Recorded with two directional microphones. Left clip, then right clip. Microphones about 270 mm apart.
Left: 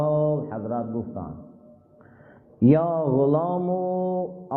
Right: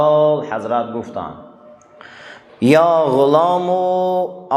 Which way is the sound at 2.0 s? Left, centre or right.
Centre.